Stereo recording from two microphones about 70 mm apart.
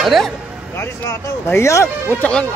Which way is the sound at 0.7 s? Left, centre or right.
Left.